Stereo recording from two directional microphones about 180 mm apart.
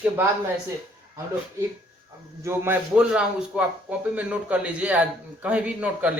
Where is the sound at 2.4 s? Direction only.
10° right (ahead or behind).